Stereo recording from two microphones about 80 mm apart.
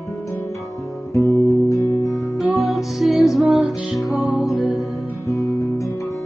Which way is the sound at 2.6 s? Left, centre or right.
Centre.